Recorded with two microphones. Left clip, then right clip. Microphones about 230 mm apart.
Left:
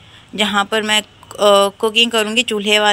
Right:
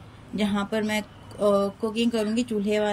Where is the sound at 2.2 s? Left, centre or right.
Left.